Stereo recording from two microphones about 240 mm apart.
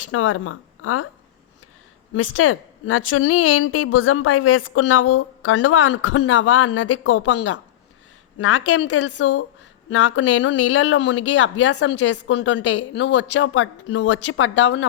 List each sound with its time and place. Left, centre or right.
0.1 s a woman's voice: left
2.1 s a woman's voice: left